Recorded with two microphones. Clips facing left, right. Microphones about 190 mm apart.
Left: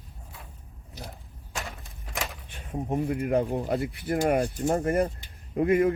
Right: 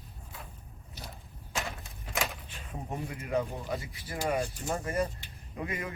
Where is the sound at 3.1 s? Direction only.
60° left (ahead or behind).